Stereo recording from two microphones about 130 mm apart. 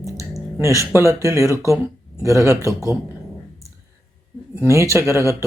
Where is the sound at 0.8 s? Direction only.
20° right (ahead or behind).